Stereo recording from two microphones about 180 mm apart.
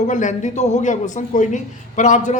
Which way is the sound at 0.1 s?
45° left (ahead or behind).